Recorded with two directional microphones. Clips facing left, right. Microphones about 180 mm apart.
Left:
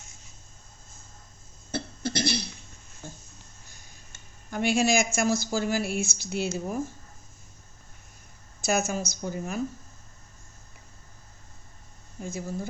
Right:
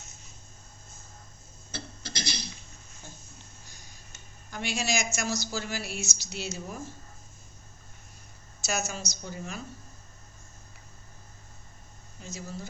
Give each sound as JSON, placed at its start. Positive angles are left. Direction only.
{"t": 1.7, "sound": "cough", "side_deg": 55}
{"t": 4.5, "sound": "a woman's voice", "side_deg": 55}
{"t": 8.6, "sound": "a woman's voice", "side_deg": 55}
{"t": 12.2, "sound": "a woman's voice", "side_deg": 50}